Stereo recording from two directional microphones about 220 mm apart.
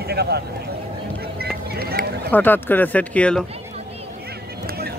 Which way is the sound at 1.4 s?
45° right (ahead or behind).